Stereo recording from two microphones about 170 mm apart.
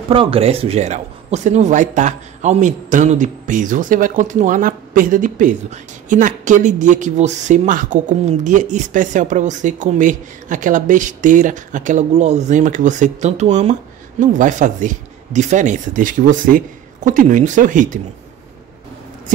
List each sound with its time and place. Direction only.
0.1 s speech: 30° right (ahead or behind); by 18.0 s 50° right (ahead or behind)